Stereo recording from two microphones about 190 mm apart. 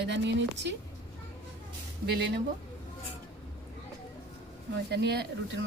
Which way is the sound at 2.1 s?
60° right (ahead or behind).